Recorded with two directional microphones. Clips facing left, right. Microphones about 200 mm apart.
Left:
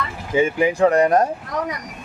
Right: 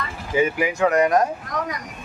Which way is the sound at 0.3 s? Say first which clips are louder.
Left 3 dB; 25° left (ahead or behind).